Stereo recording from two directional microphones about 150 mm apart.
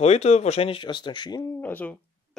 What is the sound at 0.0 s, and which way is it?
Speech, 45° left (ahead or behind).